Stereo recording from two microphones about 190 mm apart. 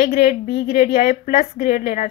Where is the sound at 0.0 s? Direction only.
55° left (ahead or behind).